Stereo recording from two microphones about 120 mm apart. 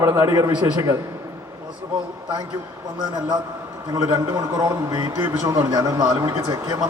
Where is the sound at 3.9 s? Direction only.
30° right (ahead or behind).